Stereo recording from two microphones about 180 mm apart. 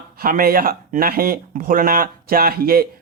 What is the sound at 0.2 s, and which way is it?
Speech, 55° right (ahead or behind).